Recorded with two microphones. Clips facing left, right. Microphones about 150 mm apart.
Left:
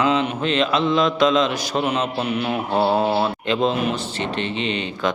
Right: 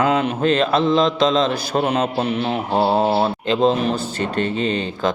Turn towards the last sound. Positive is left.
turn(degrees=-40)  # may be behind; listen again after turning